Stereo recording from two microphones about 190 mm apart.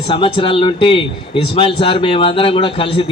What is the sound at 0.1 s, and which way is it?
Speech, 30° left (ahead or behind).